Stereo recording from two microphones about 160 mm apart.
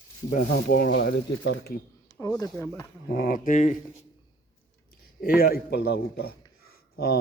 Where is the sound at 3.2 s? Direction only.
65° left (ahead or behind).